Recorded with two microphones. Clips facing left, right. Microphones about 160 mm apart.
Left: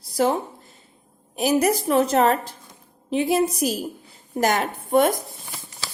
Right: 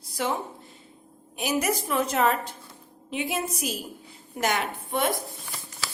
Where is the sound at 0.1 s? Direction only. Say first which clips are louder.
Left 8 dB; 40° left (ahead or behind).